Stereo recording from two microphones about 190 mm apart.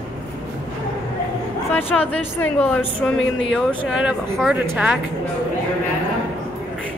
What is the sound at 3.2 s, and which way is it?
Speech, 80° left.